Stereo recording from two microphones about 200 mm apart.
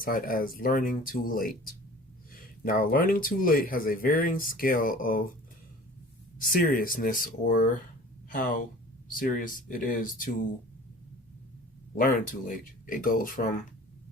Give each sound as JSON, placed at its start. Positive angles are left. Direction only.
{"t": 0.0, "sound": "speech", "side_deg": 45}
{"t": 6.4, "sound": "speech", "side_deg": 45}
{"t": 11.9, "sound": "speech", "side_deg": 40}